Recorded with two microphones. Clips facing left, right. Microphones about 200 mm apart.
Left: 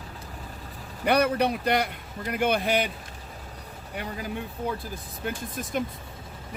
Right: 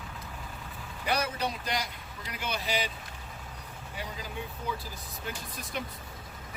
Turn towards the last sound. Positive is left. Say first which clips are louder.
# left 8 dB
turn(degrees=50)  # may be behind; listen again after turning